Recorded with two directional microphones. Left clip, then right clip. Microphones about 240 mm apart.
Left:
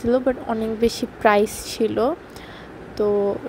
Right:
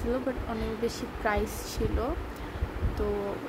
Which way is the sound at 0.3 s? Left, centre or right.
Left.